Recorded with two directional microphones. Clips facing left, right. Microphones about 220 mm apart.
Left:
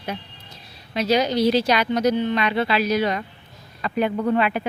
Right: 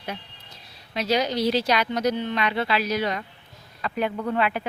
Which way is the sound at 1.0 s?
70° left (ahead or behind).